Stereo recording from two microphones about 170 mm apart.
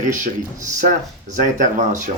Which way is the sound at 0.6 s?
50° right (ahead or behind).